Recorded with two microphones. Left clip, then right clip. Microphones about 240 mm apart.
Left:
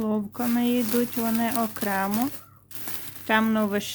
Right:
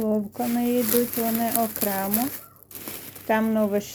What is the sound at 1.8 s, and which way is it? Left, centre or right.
Speech, left.